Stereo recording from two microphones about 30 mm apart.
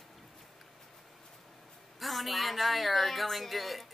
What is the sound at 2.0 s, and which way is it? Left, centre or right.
Speech, centre.